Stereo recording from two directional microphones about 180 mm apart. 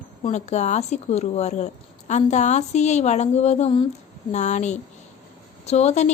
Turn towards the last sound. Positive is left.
turn(degrees=40)  # may be behind; listen again after turning